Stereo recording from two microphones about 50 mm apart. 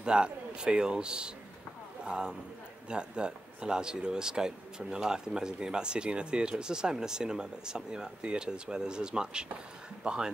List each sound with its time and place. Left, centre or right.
0.0 s speech: centre